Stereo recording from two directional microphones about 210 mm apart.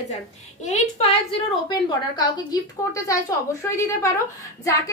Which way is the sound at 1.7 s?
20° left (ahead or behind).